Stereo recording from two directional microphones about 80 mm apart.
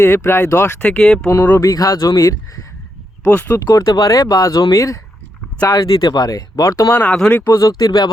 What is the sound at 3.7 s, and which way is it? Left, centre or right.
Speech, left.